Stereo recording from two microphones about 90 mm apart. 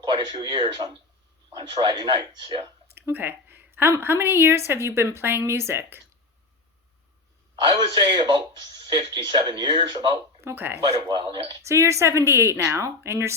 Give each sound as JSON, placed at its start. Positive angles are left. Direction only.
{"t": 0.0, "sound": "speech", "side_deg": -55}
{"t": 2.9, "sound": "speech", "side_deg": -20}
{"t": 7.5, "sound": "a man's voice", "side_deg": -60}
{"t": 10.4, "sound": "speech", "side_deg": -25}
{"t": 10.8, "sound": "speech", "side_deg": -85}
{"t": 11.6, "sound": "speech", "side_deg": -30}